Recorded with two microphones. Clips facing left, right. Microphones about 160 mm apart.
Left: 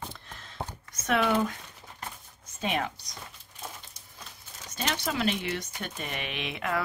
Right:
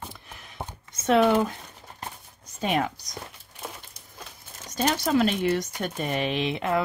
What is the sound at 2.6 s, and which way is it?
Speech, 40° right (ahead or behind).